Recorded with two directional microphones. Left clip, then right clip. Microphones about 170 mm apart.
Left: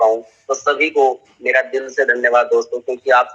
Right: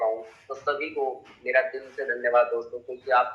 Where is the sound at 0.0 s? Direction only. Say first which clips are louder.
Left 12 dB; 50° left (ahead or behind).